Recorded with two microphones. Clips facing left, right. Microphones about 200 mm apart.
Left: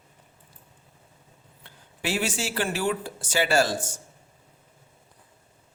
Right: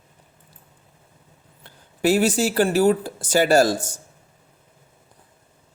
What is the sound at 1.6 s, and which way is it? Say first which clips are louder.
Speech: right 11 dB; 40° right (ahead or behind).